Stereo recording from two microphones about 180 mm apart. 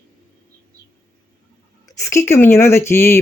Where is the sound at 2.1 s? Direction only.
15° left (ahead or behind).